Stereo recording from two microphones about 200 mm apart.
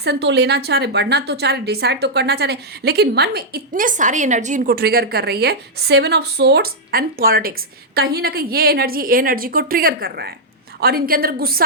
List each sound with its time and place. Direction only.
0.0 s a woman's voice: 60° right (ahead or behind)